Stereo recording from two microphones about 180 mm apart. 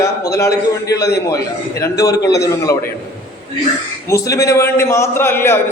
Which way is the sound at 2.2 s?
70° left (ahead or behind).